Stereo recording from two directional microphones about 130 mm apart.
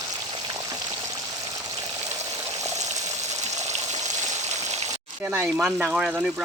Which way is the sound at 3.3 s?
60° right (ahead or behind).